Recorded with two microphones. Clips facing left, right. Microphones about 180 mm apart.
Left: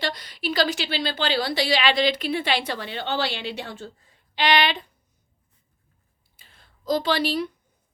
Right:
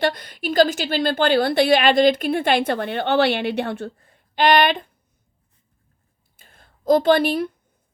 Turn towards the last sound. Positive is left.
turn(degrees=-55)  # may be behind; listen again after turning